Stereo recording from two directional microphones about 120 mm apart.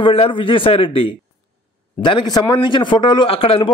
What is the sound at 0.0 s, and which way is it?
A man's voice, 50° left (ahead or behind).